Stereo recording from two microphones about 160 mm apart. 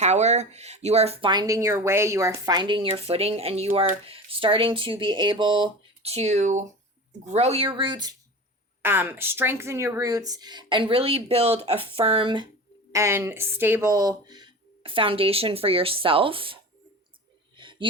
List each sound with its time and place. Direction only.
0.0 s speech: 45° right (ahead or behind); by 8.1 s 25° right (ahead or behind)
8.8 s speech: 15° right (ahead or behind); by 12.5 s 30° right (ahead or behind)
12.9 s speech: 15° right (ahead or behind); by 16.6 s 35° right (ahead or behind)
17.6 s wheeze: 30° right (ahead or behind)